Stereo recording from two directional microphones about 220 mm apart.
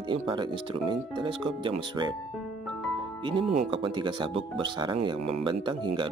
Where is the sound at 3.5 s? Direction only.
25° right (ahead or behind).